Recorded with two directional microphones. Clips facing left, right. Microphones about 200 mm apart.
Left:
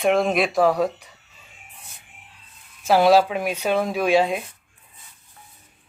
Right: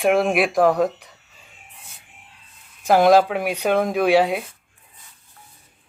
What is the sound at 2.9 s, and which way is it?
Speech, 15° right (ahead or behind).